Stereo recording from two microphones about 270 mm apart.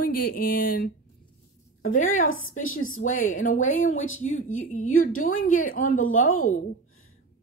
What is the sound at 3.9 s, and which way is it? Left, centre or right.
Speech, left.